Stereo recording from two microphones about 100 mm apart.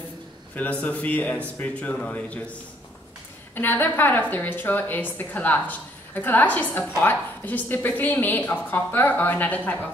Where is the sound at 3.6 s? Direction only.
20° left (ahead or behind).